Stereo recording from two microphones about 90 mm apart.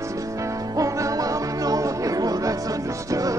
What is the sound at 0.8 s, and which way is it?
Music, 35° right (ahead or behind).